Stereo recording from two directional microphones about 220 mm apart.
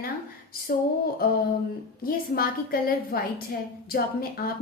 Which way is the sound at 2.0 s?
40° left (ahead or behind).